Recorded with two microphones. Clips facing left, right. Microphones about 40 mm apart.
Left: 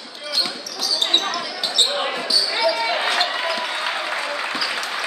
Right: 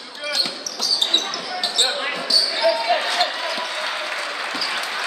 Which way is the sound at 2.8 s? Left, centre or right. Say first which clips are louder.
Right 1 dB; centre.